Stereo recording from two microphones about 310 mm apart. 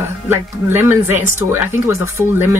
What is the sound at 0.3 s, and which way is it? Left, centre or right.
Speech, centre.